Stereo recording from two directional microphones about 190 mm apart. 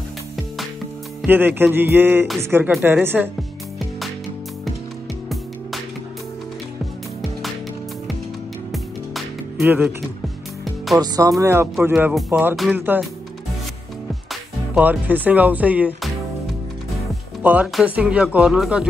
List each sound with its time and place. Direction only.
1.2 s speech: 10° right (ahead or behind)
8.7 s music: centre (ahead or behind)
9.7 s speech: 10° right (ahead or behind)
11.0 s speech: 20° right (ahead or behind)
14.3 s speech: 5° right (ahead or behind)
17.4 s speech: 10° right (ahead or behind)